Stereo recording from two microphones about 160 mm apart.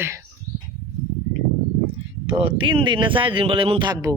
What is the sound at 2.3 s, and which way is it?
Speech, 35° right (ahead or behind).